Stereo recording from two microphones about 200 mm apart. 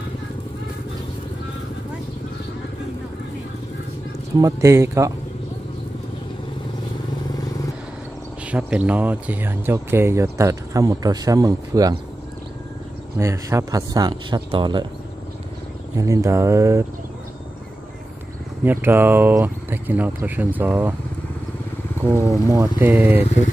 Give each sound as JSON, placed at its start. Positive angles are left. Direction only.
{"t": 4.4, "sound": "speech", "side_deg": -15}
{"t": 8.5, "sound": "speech", "side_deg": -5}
{"t": 13.2, "sound": "speech", "side_deg": -15}
{"t": 16.0, "sound": "speech", "side_deg": -15}
{"t": 18.6, "sound": "speech", "side_deg": -10}
{"t": 22.5, "sound": "speech", "side_deg": -15}